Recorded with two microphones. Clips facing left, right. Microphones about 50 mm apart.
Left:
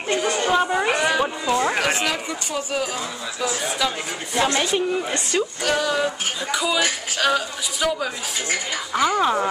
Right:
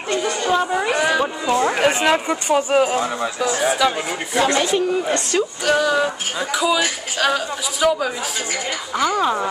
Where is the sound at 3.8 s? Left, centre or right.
Centre.